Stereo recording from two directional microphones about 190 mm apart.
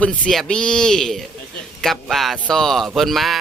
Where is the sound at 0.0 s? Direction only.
5° left (ahead or behind).